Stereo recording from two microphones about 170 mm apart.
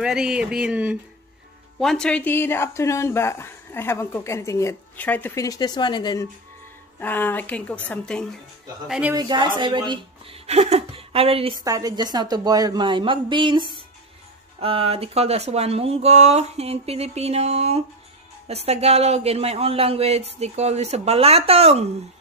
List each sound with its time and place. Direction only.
0.0 s speech: 5° right (ahead or behind); by 6.2 s 25° left (ahead or behind)
7.0 s speech: 10° left (ahead or behind)
9.1 s speech: 25° right (ahead or behind)
11.6 s a woman's voice: 20° right (ahead or behind); by 21.8 s 35° right (ahead or behind)